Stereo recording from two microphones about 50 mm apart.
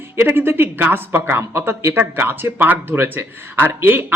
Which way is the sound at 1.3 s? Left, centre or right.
Right.